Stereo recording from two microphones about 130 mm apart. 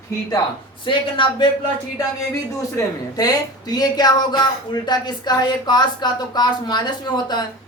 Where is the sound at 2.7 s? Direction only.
30° left (ahead or behind).